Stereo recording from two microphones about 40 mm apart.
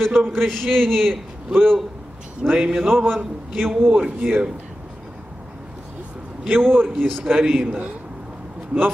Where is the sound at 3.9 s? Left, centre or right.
Right.